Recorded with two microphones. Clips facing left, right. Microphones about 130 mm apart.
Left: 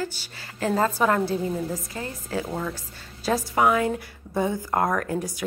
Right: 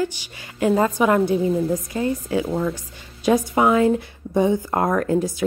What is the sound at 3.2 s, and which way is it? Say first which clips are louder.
A woman's voice: right 4 dB; 20° right (ahead or behind).